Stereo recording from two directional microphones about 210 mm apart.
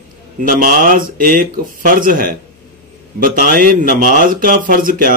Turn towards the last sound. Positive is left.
turn(degrees=-40)  # may be behind; listen again after turning